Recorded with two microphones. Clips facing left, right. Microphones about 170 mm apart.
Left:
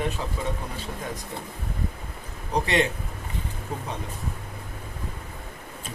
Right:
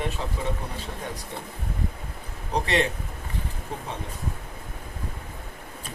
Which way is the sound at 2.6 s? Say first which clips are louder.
Even; 35° right (ahead or behind).